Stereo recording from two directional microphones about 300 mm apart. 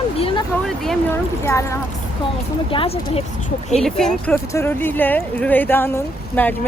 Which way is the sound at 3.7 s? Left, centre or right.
Centre.